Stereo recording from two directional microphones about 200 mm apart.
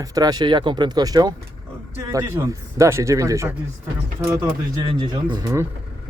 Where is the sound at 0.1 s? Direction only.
20° right (ahead or behind).